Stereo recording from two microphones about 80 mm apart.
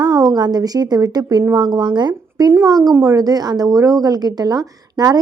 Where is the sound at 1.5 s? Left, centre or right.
Right.